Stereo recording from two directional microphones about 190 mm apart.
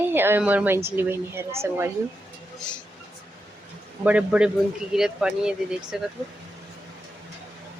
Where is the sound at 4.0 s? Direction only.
5° right (ahead or behind).